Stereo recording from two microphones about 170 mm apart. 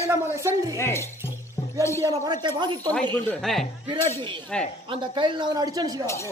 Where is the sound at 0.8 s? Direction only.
15° left (ahead or behind).